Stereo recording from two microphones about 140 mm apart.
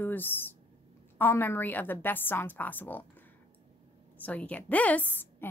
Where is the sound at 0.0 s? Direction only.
15° left (ahead or behind).